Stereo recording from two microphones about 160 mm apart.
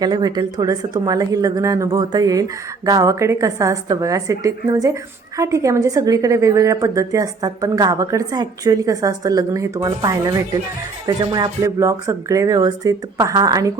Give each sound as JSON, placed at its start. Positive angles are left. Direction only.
{"t": 0.0, "sound": "a woman's voice", "side_deg": -25}